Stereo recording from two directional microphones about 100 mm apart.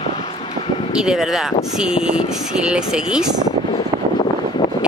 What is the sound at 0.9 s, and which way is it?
Speech, 5° right (ahead or behind).